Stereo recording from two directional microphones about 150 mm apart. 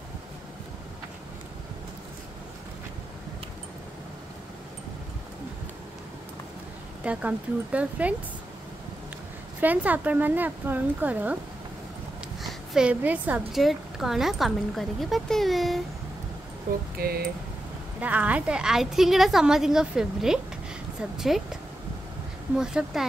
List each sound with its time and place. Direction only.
7.0 s speech: 10° right (ahead or behind)
9.6 s speech: 10° right (ahead or behind)
12.7 s a woman's voice: 10° right (ahead or behind)
17.0 s speech: 90° right
18.0 s a woman's voice: 10° right (ahead or behind)
22.6 s a woman's voice: 5° right (ahead or behind)